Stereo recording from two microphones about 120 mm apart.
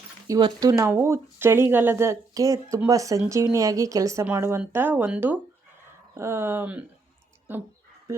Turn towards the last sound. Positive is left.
turn(degrees=-20)  # may be behind; listen again after turning